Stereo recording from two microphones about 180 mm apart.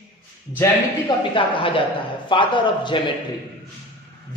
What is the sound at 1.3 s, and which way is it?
A woman's voice, 30° left (ahead or behind).